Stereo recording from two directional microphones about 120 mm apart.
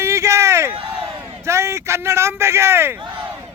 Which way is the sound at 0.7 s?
45° right (ahead or behind).